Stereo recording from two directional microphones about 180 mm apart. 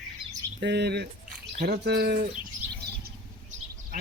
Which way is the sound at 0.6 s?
70° right (ahead or behind).